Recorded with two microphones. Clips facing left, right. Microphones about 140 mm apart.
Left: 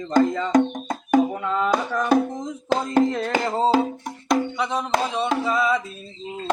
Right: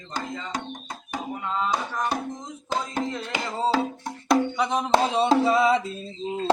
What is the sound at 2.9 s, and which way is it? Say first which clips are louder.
Music: left 9 dB; 70° left (ahead or behind).